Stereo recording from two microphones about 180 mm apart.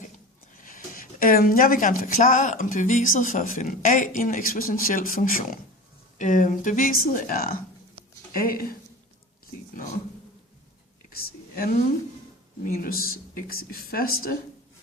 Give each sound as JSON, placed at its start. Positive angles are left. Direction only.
{"t": 0.6, "sound": "speech", "side_deg": 50}
{"t": 9.7, "sound": "speech", "side_deg": 45}
{"t": 11.1, "sound": "whispering", "side_deg": 50}
{"t": 12.6, "sound": "speech", "side_deg": 55}